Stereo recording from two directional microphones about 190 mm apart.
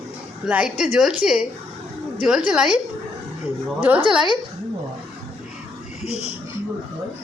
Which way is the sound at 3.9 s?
10° right (ahead or behind).